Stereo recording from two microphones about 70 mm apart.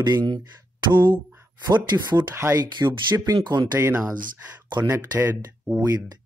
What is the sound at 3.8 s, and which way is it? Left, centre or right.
Speech, right.